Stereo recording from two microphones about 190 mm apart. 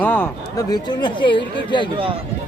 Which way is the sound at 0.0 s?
10° left (ahead or behind).